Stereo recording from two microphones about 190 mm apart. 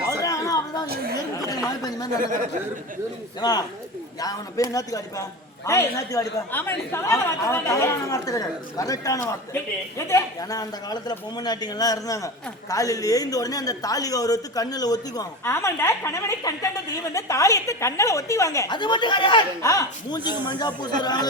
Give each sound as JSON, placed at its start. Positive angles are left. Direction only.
{"t": 0.2, "sound": "a sound", "side_deg": 15}
{"t": 1.4, "sound": "speech", "side_deg": 20}
{"t": 3.4, "sound": "a woman's voice", "side_deg": 20}